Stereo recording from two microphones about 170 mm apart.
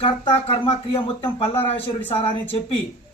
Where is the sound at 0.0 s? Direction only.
35° left (ahead or behind).